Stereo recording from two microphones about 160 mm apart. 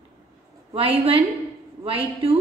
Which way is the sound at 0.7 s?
35° right (ahead or behind).